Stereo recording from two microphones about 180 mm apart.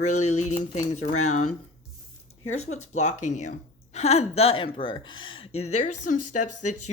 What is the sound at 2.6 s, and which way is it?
Speech, 40° left (ahead or behind).